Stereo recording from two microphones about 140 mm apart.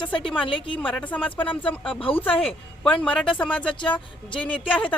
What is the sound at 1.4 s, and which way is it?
Speech, 10° left (ahead or behind).